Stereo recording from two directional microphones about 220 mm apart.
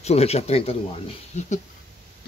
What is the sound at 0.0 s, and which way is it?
Speech, 30° left (ahead or behind).